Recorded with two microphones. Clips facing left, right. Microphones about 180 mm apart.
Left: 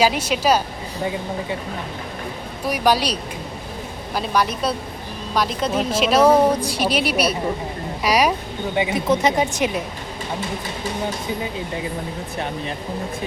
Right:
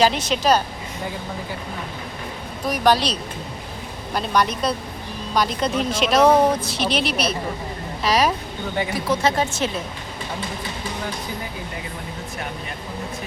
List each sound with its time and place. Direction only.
0.0 s a woman's voice: 10° left (ahead or behind)
2.6 s a woman's voice: 10° left (ahead or behind)